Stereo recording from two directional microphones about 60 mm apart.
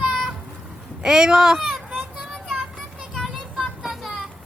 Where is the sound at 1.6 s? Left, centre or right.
Centre.